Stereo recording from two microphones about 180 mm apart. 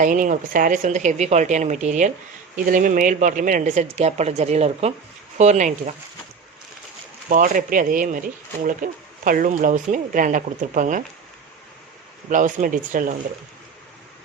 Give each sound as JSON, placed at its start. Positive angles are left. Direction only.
{"t": 0.0, "sound": "a woman's voice", "side_deg": -45}
{"t": 7.3, "sound": "speech", "side_deg": -45}
{"t": 12.3, "sound": "speech", "side_deg": -45}